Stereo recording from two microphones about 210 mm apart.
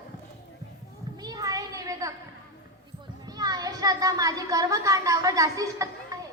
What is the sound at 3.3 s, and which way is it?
Speech, 15° right (ahead or behind).